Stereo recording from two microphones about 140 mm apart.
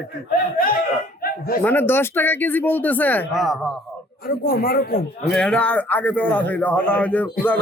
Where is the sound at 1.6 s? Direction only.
15° left (ahead or behind).